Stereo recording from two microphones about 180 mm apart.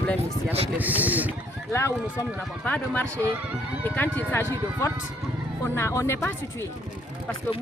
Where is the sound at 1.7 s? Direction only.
15° left (ahead or behind).